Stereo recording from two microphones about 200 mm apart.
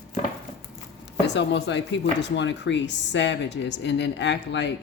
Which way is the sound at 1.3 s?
60° left (ahead or behind).